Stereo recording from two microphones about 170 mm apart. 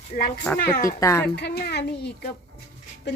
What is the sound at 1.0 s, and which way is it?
Speech, 15° left (ahead or behind).